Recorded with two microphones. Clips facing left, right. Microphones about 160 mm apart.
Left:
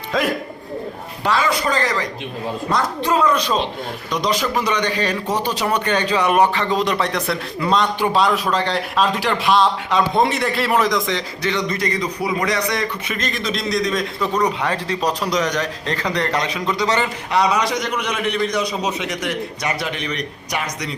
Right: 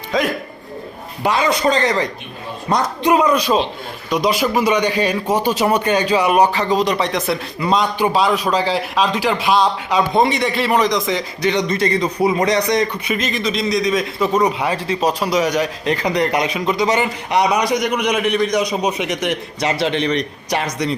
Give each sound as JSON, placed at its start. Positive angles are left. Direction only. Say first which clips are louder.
{"t": 0.1, "sound": "a man's voice", "louder": "right 2 dB", "side_deg": 0}
{"t": 1.2, "sound": "a man's voice", "louder": "right 3 dB", "side_deg": -20}
{"t": 11.4, "sound": "a man's voice", "louder": "right 5 dB", "side_deg": -20}
{"t": 13.1, "sound": "a man's voice", "louder": "right 4 dB", "side_deg": -5}